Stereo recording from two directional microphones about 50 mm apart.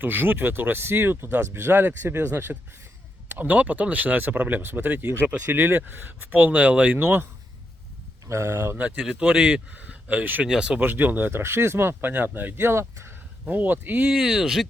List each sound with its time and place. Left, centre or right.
0.0 s speech: right
8.3 s speech: right
9.0 s speech: right
10.4 s speech: centre
10.8 s speech: right
12.0 s speech: right
13.5 s speech: right
14.1 s speech: centre